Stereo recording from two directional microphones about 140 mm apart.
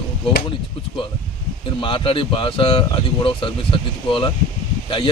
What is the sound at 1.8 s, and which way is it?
Speech, 35° left (ahead or behind).